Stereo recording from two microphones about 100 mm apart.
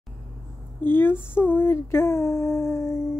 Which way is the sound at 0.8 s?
20° left (ahead or behind).